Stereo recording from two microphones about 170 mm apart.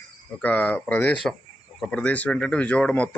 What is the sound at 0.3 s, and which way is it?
Speech, 10° left (ahead or behind).